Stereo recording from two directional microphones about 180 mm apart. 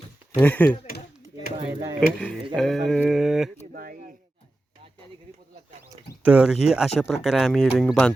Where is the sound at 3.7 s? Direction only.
50° right (ahead or behind).